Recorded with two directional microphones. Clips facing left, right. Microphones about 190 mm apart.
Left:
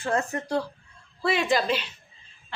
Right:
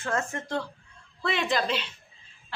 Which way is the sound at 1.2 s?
5° left (ahead or behind).